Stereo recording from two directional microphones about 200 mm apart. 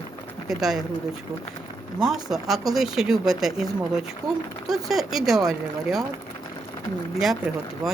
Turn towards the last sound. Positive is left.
turn(degrees=0)  # may be behind; listen again after turning